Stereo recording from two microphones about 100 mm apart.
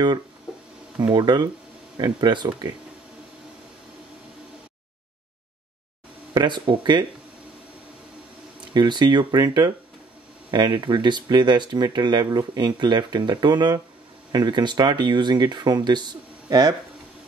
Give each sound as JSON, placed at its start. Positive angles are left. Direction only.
{"t": 1.1, "sound": "speech", "side_deg": -45}
{"t": 6.3, "sound": "speech", "side_deg": -50}
{"t": 8.7, "sound": "speech", "side_deg": -45}